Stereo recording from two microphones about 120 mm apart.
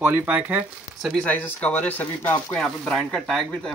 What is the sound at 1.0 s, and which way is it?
Speech, centre (ahead or behind).